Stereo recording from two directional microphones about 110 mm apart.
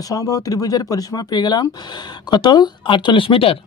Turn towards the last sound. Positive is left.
turn(degrees=55)  # may be behind; listen again after turning